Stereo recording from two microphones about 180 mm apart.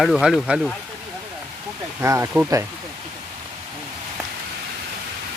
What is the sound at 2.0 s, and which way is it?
Speech, 15° right (ahead or behind).